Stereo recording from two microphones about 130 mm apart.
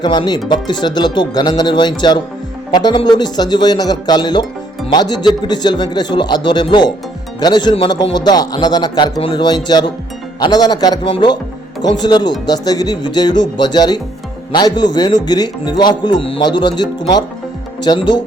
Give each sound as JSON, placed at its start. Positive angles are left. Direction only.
{"t": 0.0, "sound": "speech", "side_deg": 35}